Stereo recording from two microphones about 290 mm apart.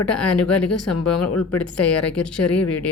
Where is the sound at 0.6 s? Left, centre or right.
Left.